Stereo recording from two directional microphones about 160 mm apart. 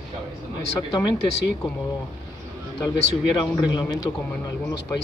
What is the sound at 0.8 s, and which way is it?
Speech, 25° left (ahead or behind).